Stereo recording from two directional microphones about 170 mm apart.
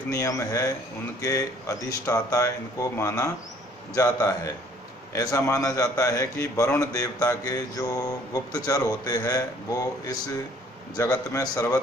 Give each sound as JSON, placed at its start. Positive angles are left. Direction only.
{"t": 0.1, "sound": "a man's voice", "side_deg": 20}